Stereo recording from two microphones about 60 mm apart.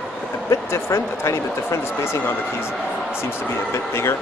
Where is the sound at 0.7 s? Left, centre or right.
Left.